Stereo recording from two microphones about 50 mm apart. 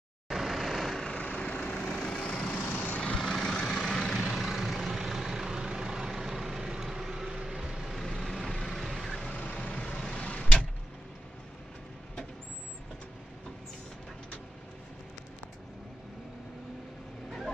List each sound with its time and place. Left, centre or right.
0.3 s vehicle: centre
1.1 s vehicle: left
1.8 s vehicle: centre
2.6 s vehicle: left
3.2 s vehicle: centre
4.4 s vehicle: centre
9.3 s vehicle: left